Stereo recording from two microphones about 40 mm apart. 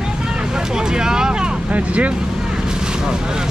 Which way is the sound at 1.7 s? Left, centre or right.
Right.